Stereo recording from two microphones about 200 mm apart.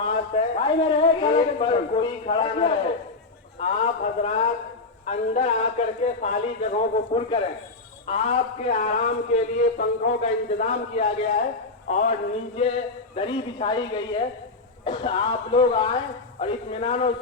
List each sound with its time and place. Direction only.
0.0 s a man's voice: 30° left (ahead or behind)
7.1 s a man's voice: 25° left (ahead or behind)